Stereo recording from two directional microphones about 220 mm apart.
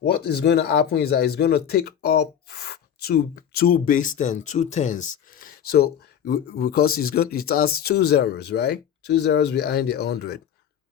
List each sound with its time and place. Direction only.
0.0 s speech: 50° left (ahead or behind)